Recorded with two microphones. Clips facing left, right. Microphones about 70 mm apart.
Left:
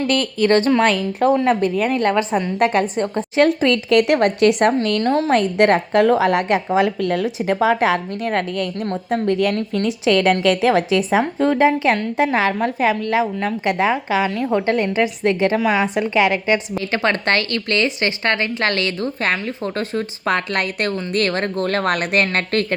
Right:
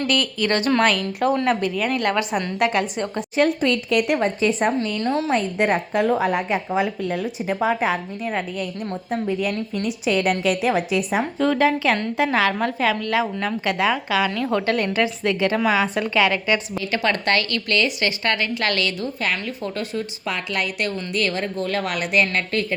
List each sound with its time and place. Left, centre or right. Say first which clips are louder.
0.1 s a woman's voice: left 7 dB; left
3.3 s a woman's voice: left 4 dB; left
5.0 s a woman's voice: left 3 dB; left
5.3 s a woman's voice: left 7 dB; left
11.3 s a woman's voice: left 1 dB; left
14.3 s a woman's voice: left 2 dB; centre
14.5 s a woman's voice: left 4 dB; left